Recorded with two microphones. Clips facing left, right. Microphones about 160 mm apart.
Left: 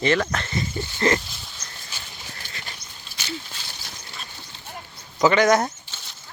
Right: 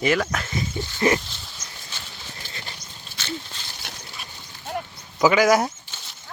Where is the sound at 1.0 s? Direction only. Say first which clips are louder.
Right 1 dB; 15° right (ahead or behind).